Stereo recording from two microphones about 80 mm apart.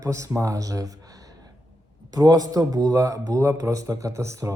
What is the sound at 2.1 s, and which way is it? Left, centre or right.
Speech, right.